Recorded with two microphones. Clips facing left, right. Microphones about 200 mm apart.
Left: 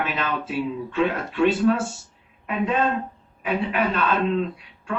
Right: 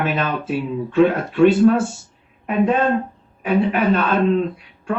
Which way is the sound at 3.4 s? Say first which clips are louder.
Right 6 dB; 45° right (ahead or behind).